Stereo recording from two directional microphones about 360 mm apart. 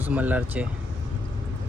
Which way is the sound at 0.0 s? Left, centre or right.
Centre.